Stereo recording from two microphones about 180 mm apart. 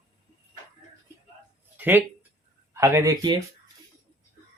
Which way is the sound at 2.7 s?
15° right (ahead or behind).